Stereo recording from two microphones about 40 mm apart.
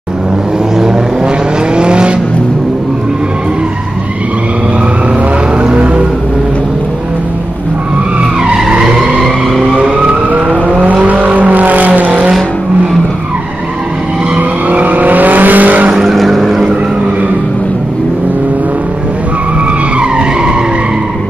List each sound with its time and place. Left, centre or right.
0.7 s vehicle: centre
1.8 s vehicle: right
10.0 s vehicle: right
14.3 s vehicle: right
15.9 s vehicle: centre
20.0 s vehicle: right